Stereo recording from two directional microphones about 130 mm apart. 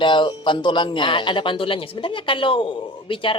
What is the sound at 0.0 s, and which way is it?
A man's voice, 40° left (ahead or behind).